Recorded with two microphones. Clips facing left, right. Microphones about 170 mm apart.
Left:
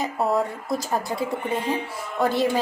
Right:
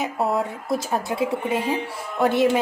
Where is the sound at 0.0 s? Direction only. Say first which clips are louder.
Even; centre (ahead or behind).